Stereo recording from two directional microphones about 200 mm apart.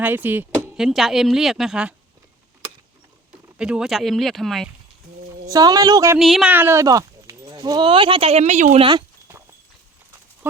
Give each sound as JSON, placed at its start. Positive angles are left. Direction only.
{"t": 0.0, "sound": "speech", "side_deg": -10}
{"t": 3.6, "sound": "speech", "side_deg": -5}
{"t": 5.5, "sound": "a woman's voice", "side_deg": -20}
{"t": 6.1, "sound": "speech", "side_deg": 0}